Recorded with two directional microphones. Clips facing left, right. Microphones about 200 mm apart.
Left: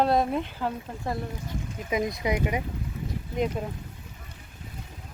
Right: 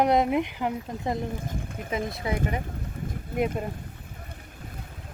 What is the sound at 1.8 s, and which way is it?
Speech, 15° left (ahead or behind).